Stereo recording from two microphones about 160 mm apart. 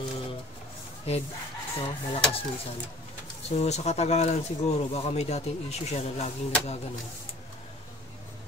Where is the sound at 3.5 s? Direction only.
45° left (ahead or behind).